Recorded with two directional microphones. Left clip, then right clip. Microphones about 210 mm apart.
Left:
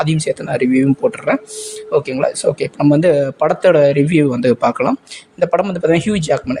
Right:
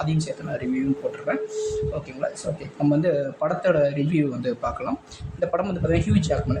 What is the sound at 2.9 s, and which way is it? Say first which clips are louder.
Speech: left 9 dB; 45° left (ahead or behind).